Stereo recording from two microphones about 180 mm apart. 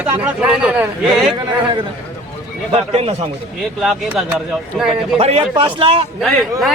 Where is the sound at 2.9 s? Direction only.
35° right (ahead or behind).